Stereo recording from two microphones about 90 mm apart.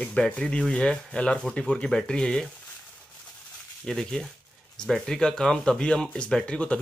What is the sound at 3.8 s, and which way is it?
Speech, 5° left (ahead or behind).